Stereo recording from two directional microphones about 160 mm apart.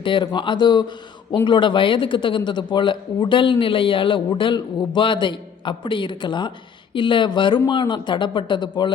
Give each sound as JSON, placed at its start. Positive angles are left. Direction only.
{"t": 0.0, "sound": "a man's voice", "side_deg": 30}